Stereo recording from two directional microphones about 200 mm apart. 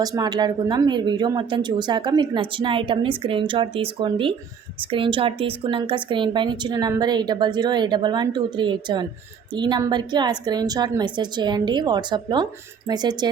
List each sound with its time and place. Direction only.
0.0 s speech: 20° right (ahead or behind)